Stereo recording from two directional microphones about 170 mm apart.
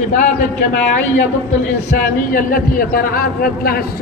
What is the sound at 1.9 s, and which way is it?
A man's voice, 55° left (ahead or behind).